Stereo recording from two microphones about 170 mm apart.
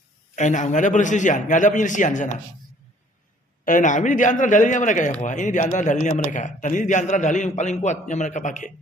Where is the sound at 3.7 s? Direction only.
50° left (ahead or behind).